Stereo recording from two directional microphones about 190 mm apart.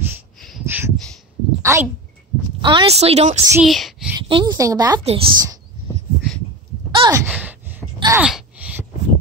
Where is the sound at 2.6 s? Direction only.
30° right (ahead or behind).